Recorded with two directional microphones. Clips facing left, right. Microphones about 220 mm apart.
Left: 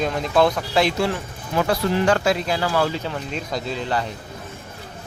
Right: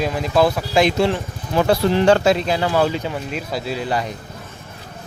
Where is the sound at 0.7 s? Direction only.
15° right (ahead or behind).